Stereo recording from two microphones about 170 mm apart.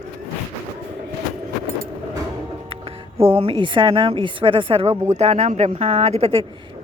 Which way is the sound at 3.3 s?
35° right (ahead or behind).